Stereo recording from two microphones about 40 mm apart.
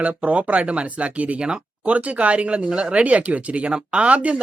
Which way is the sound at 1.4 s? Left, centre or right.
Right.